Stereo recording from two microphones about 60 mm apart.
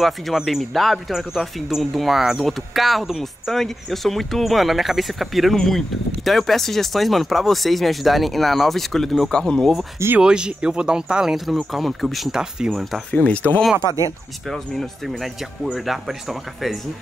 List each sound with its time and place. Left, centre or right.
0.6 s speech: centre
10.2 s speech: centre
12.4 s speech: centre
13.1 s speech: left
13.7 s speech: right
14.5 s speech: centre